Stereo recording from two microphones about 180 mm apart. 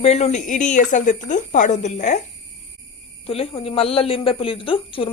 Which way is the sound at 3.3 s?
30° left (ahead or behind).